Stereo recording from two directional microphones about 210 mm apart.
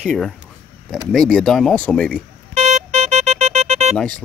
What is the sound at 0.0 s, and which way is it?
Speech, centre (ahead or behind).